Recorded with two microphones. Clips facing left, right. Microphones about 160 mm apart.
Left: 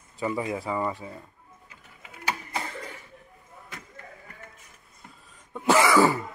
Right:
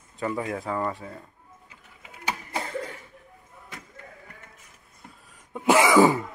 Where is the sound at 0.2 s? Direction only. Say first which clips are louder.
Even; 5° left (ahead or behind).